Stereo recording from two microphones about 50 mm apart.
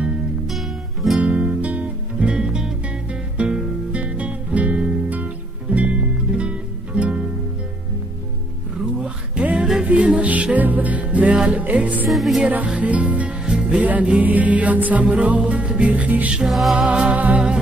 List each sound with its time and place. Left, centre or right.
0.5 s music: centre
1.2 s music: right
9.6 s music: centre; by 12.1 s right
12.1 s music: centre
12.4 s speech: right
14.2 s music: right
16.4 s music: centre
16.7 s music: centre